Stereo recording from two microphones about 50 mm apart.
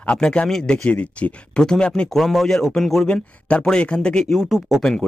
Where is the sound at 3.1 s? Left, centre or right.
Left.